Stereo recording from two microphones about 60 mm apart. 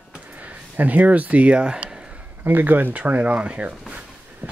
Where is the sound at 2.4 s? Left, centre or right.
Right.